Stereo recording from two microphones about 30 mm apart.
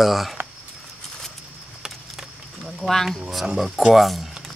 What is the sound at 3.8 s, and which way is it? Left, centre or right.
Speech, centre.